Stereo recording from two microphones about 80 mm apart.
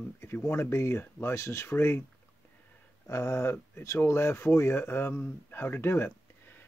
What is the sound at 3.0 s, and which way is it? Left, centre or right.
Speech, left.